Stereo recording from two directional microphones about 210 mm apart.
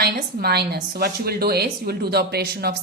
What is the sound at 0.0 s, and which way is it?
A woman's voice, 50° right (ahead or behind).